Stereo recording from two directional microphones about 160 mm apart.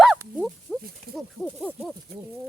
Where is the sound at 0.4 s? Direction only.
Centre (ahead or behind).